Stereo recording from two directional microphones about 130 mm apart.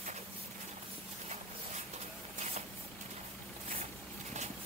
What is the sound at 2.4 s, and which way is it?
Vehicle, 55° right (ahead or behind).